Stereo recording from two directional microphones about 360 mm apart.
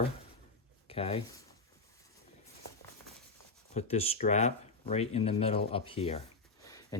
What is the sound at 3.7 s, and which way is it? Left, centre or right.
Speech, centre.